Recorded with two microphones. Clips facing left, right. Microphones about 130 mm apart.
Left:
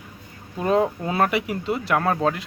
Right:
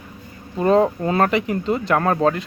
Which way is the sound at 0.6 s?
5° left (ahead or behind).